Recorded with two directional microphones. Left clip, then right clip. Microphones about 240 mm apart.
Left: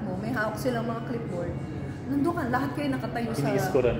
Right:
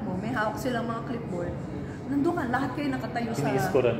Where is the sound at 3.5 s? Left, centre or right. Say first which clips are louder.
Even; centre.